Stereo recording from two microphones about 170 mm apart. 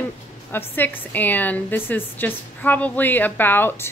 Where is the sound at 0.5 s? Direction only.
10° left (ahead or behind).